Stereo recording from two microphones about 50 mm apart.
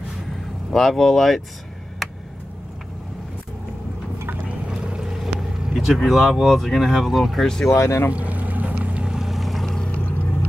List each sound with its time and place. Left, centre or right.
0.7 s speech: centre
4.6 s vehicle: centre
6.0 s speech: centre
7.4 s speech: centre
7.7 s speech: left
8.1 s boat: right
9.1 s vehicle: centre